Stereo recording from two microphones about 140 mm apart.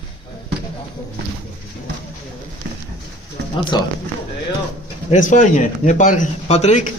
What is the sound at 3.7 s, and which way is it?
Speech, 30° left (ahead or behind).